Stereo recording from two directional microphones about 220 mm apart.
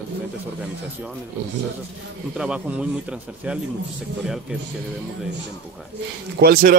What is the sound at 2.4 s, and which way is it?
Speech, 5° right (ahead or behind).